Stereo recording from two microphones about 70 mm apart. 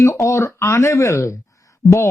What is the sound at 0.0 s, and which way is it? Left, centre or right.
Speech, left.